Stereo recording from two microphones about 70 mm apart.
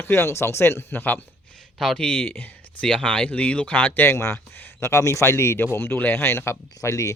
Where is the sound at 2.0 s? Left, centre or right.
Centre.